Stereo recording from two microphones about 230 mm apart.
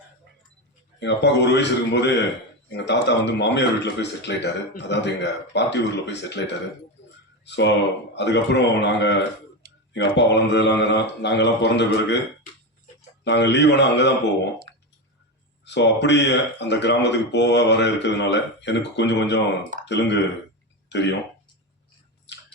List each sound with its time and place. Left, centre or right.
0.9 s speech: left
13.2 s speech: left
15.6 s speech: left
22.3 s biting: left